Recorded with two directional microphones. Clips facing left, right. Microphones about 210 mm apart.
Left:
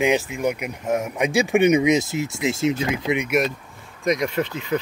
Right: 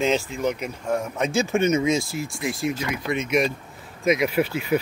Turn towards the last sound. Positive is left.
turn(degrees=-10)  # may be behind; listen again after turning